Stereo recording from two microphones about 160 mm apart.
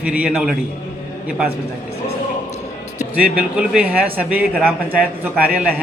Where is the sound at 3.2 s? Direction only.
5° right (ahead or behind).